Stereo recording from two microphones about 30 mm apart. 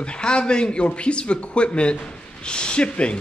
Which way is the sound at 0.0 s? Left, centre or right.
Left.